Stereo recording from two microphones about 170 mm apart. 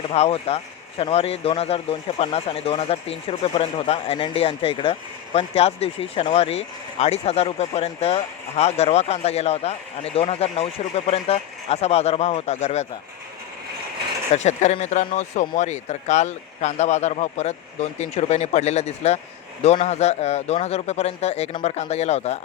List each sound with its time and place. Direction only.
0.1 s speech: 35° left (ahead or behind)
14.3 s speech: 40° left (ahead or behind)